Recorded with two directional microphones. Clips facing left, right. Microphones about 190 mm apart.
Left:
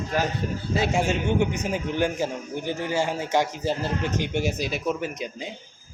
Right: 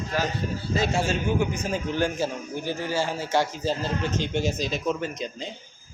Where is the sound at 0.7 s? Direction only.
15° left (ahead or behind).